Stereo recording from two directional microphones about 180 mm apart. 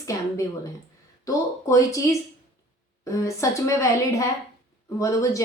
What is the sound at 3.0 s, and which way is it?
Speech, 15° left (ahead or behind).